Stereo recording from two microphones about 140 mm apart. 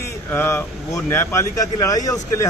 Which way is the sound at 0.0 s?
15° left (ahead or behind).